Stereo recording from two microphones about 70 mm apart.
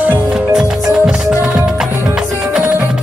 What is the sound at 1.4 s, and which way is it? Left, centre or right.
Music, centre.